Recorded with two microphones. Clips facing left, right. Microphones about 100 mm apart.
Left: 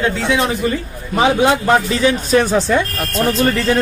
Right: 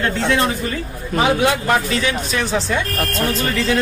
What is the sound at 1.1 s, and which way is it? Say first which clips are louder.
A man's voice: left 3 dB; 25° left (ahead or behind).